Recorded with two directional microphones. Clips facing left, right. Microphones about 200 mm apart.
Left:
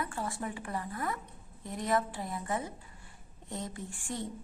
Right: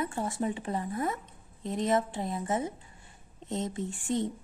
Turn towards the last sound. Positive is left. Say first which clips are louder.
# right 8 dB
turn(degrees=-20)  # may be behind; listen again after turning